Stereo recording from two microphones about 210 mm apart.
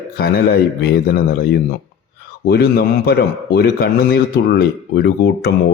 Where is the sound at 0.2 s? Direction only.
45° left (ahead or behind).